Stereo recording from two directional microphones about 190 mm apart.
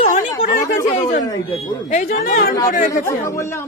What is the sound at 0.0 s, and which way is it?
Chatter, 45° left (ahead or behind).